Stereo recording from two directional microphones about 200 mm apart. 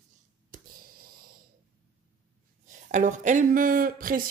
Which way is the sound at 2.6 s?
40° right (ahead or behind).